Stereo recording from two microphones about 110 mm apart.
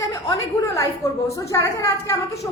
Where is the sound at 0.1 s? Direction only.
30° left (ahead or behind).